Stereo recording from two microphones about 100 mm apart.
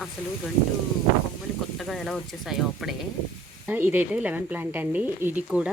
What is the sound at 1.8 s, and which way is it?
Speech, centre (ahead or behind).